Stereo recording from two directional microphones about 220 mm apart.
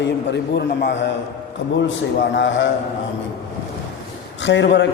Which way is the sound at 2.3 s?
55° left (ahead or behind).